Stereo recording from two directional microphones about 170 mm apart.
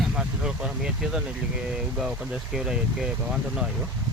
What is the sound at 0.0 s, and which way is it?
Vehicle, 5° right (ahead or behind).